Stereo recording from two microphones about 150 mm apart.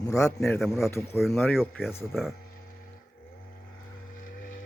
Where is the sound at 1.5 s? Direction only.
5° right (ahead or behind).